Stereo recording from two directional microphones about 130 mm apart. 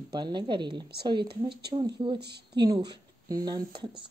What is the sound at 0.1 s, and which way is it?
Speech, 35° right (ahead or behind).